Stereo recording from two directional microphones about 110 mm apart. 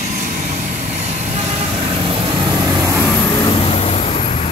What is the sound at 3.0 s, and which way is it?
Vehicle, 15° left (ahead or behind).